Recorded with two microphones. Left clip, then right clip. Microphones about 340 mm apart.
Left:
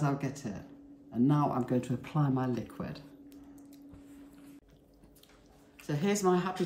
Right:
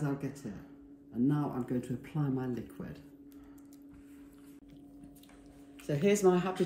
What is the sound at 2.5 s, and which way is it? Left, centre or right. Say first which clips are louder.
Speech: left 4 dB; centre.